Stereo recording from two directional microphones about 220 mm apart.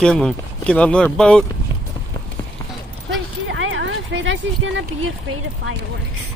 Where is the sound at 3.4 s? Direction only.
60° right (ahead or behind).